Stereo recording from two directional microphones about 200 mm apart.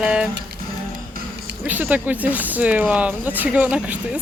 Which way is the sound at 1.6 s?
10° right (ahead or behind).